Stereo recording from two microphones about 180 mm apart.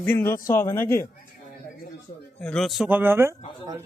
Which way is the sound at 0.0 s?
10° left (ahead or behind).